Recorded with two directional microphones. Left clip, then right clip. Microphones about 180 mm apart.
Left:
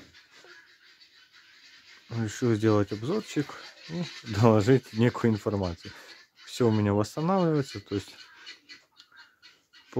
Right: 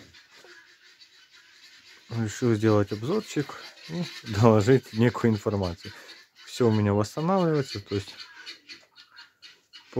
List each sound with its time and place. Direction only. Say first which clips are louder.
2.0 s speech: right 2 dB; 5° left (ahead or behind)